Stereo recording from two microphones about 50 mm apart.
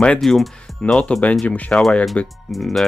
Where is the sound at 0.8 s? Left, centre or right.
Centre.